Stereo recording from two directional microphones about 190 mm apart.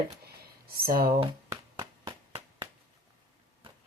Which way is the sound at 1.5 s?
15° right (ahead or behind).